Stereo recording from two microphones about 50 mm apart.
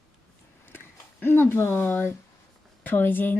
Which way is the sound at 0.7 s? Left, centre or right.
Left.